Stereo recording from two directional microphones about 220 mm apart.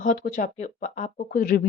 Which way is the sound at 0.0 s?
35° left (ahead or behind).